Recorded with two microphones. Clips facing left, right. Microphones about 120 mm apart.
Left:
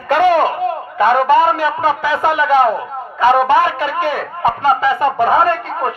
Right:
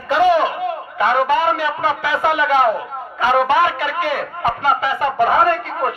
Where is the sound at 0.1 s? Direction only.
55° left (ahead or behind).